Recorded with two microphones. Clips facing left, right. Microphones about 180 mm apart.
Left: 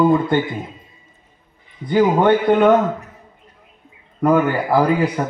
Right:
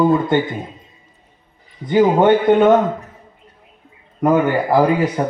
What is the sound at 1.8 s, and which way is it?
A man's voice, 20° right (ahead or behind).